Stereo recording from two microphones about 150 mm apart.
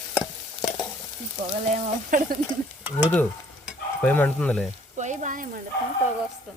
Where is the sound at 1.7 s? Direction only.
60° right (ahead or behind).